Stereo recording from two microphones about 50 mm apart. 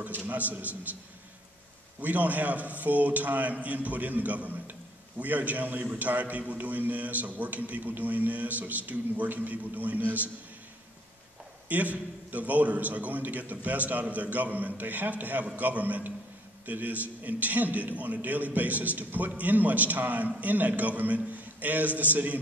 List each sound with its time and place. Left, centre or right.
0.0 s a man's voice: right
2.0 s a man's voice: right
11.7 s a man's voice: right